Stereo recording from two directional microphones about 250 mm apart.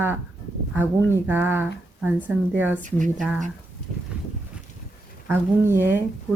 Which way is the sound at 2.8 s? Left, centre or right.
Right.